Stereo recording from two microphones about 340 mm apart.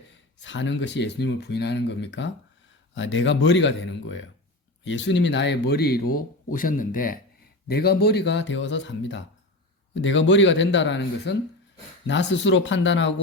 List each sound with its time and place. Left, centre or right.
0.4 s speech: left